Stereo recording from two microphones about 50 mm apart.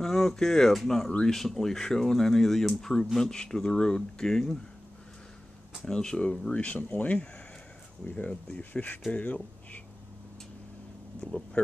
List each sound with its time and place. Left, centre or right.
0.0 s speech: centre
5.9 s speech: centre; by 9.8 s left
11.6 s speech: left